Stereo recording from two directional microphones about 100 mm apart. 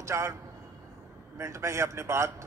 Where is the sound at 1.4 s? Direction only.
30° right (ahead or behind).